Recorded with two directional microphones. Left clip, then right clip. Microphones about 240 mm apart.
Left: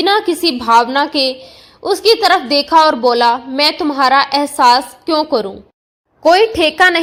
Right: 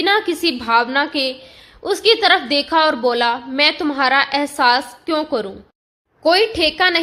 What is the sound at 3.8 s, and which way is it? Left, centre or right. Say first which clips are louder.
A woman's voice: left 4 dB; centre.